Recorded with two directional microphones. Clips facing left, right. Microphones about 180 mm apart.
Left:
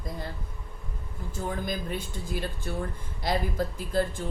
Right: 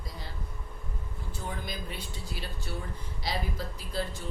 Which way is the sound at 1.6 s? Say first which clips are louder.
Left 7 dB; 45° left (ahead or behind).